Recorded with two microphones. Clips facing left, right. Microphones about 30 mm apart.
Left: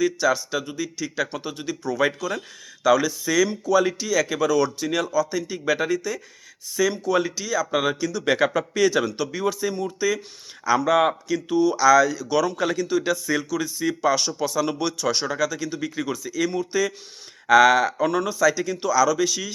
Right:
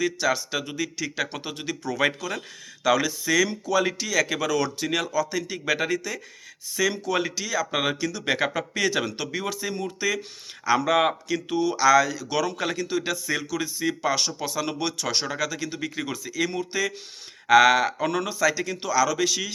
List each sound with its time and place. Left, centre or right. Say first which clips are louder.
0.0 s speech: left 3 dB; right
0.5 s speech: left 1 dB; right
1.1 s speech: left 2 dB; right
2.0 s speech: left 1 dB; right
3.9 s speech: left 2 dB; right
5.1 s speech: left 3 dB; right
5.6 s speech: left 3 dB; right
8.2 s speech: left 5 dB; right
8.7 s speech: left 4 dB; right
14.3 s speech: left 5 dB; centre
14.6 s speech: left 3 dB; right
19.0 s speech: left 2 dB; right